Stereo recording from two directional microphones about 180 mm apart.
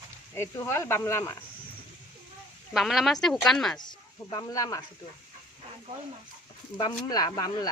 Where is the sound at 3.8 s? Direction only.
20° left (ahead or behind).